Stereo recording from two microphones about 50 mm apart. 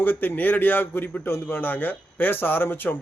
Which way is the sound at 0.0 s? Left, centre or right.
Left.